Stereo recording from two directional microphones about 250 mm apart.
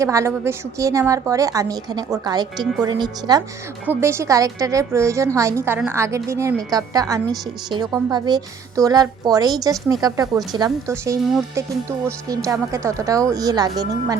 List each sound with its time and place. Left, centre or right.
0.0 s a woman's voice: centre
11.3 s speech: centre
12.3 s a woman's voice: centre